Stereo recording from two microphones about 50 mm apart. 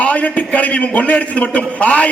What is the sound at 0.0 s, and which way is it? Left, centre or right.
A man's voice, left.